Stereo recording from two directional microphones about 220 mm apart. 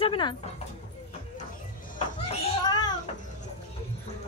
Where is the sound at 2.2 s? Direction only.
20° left (ahead or behind).